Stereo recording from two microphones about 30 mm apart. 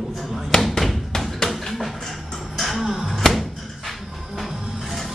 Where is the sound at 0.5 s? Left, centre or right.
Left.